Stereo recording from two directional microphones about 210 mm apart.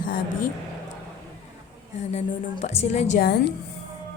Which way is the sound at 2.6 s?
30° left (ahead or behind).